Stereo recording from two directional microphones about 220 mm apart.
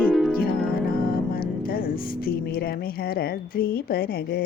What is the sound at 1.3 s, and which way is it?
Mantra, 40° left (ahead or behind).